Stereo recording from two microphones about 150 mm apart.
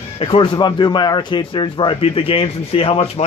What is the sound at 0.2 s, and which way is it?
A man's voice, 35° left (ahead or behind).